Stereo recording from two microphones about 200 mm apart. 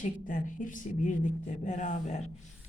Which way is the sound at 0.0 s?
40° left (ahead or behind).